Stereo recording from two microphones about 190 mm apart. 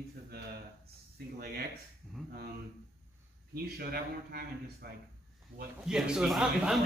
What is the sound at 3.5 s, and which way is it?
Speech, 55° right (ahead or behind).